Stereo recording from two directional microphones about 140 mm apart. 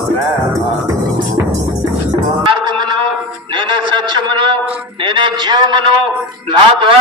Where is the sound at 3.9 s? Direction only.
35° right (ahead or behind).